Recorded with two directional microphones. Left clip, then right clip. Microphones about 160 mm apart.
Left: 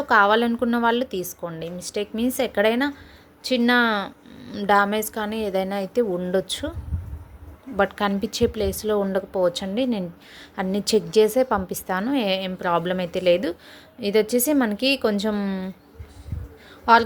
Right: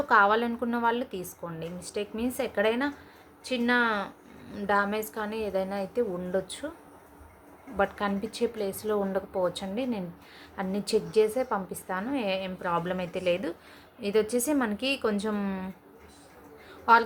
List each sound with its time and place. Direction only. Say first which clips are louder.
0.0 s a woman's voice: left 5 dB; 35° left (ahead or behind)
7.8 s speech: left 6 dB; 45° left (ahead or behind)
16.9 s speech: left 5 dB; 35° left (ahead or behind)